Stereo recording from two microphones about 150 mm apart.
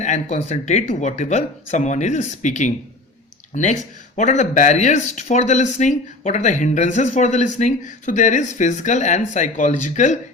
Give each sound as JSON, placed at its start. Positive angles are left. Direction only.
{"t": 0.0, "sound": "speech", "side_deg": 50}